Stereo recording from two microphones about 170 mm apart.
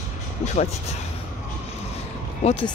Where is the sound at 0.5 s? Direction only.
40° left (ahead or behind).